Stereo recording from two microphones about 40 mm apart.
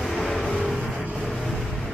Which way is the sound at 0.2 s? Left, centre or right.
Centre.